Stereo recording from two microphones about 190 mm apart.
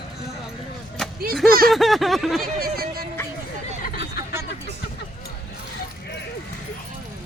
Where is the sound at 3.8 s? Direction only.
55° left (ahead or behind).